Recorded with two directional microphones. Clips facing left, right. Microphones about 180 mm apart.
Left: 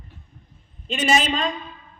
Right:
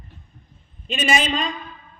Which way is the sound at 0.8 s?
15° right (ahead or behind).